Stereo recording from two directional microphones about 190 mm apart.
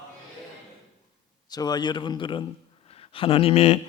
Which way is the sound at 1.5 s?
20° left (ahead or behind).